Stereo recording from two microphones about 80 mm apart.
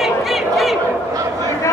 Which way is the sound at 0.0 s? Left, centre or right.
Centre.